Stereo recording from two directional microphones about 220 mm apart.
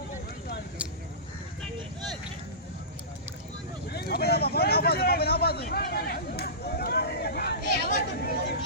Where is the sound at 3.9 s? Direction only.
45° left (ahead or behind).